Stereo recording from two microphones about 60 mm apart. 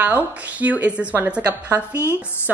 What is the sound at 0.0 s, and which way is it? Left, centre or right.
A woman's voice, right.